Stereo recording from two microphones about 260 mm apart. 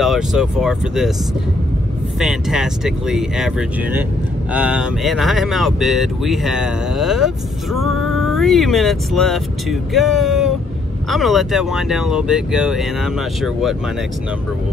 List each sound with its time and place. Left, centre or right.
0.0 s speech: centre
2.1 s speech: centre
7.8 s music: right
8.1 s speech: centre